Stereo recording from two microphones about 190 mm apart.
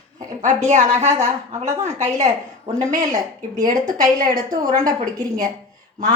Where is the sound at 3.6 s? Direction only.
45° right (ahead or behind).